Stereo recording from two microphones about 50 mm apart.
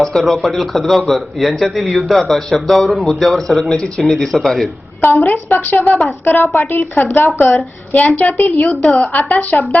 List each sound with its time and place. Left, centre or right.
0.0 s a man's voice: centre
5.0 s a woman's voice: left
5.8 s speech: left
6.3 s a woman's voice: left
7.9 s a woman's voice: left